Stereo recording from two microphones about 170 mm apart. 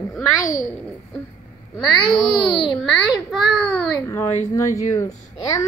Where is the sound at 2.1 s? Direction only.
25° left (ahead or behind).